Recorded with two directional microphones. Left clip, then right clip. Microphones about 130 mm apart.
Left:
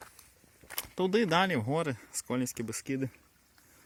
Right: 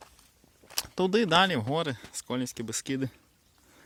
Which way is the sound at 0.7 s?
35° right (ahead or behind).